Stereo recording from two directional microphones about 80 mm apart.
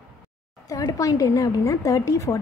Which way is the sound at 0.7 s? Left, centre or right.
Left.